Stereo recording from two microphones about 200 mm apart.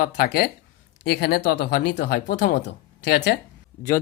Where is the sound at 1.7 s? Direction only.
45° left (ahead or behind).